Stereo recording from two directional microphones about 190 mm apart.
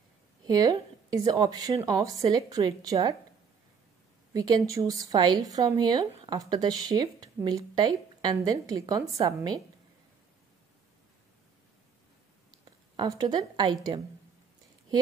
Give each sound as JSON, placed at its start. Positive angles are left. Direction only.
{"t": 0.5, "sound": "a woman's voice", "side_deg": -20}
{"t": 4.3, "sound": "a woman's voice", "side_deg": -20}
{"t": 12.4, "sound": "a woman's voice", "side_deg": -20}